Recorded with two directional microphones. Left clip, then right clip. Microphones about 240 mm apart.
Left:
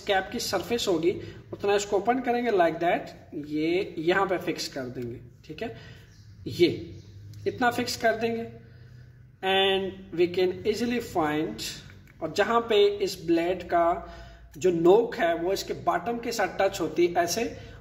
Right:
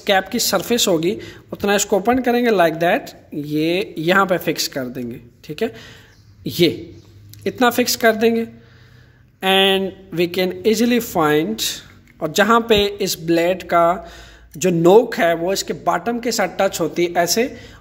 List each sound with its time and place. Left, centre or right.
0.0 s a man's voice: right